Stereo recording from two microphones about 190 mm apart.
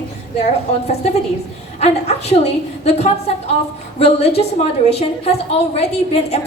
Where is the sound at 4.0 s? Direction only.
35° left (ahead or behind).